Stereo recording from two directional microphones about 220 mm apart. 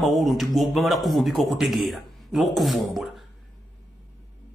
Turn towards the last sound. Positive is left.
turn(degrees=0)  # may be behind; listen again after turning